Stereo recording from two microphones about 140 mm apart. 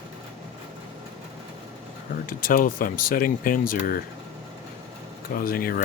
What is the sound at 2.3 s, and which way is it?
Speech, 80° left.